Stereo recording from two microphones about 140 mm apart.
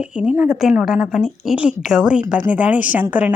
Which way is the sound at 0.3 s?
10° right (ahead or behind).